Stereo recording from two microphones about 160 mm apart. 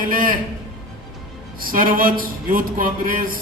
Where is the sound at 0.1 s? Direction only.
60° right (ahead or behind).